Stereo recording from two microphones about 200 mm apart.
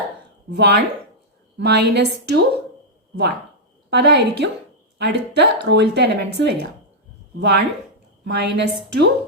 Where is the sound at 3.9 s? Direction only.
60° right (ahead or behind).